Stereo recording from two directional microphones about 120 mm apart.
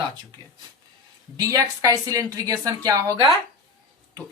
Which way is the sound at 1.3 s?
30° right (ahead or behind).